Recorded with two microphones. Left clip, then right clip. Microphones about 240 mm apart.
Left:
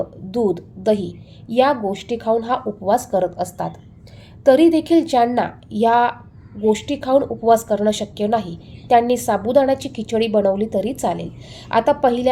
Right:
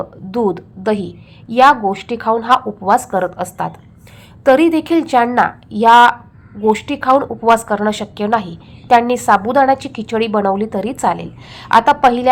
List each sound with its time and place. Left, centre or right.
0.3 s a woman's voice: centre
4.4 s a woman's voice: centre